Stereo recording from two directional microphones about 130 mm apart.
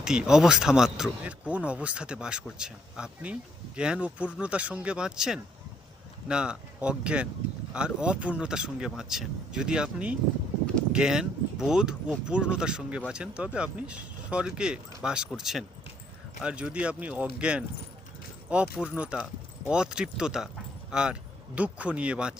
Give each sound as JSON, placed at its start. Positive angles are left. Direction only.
{"t": 0.0, "sound": "speech", "side_deg": -5}